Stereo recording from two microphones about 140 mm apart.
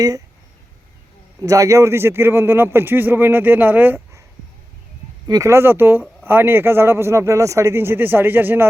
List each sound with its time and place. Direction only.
1.4 s speech: 25° right (ahead or behind)
5.3 s speech: 20° right (ahead or behind)